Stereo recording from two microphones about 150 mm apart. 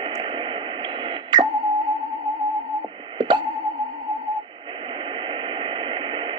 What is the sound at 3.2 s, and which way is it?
Music, 30° right (ahead or behind).